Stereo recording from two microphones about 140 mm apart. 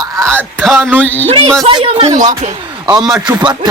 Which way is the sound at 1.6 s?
40° right (ahead or behind).